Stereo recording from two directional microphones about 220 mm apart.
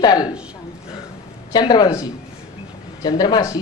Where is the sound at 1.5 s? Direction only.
20° left (ahead or behind).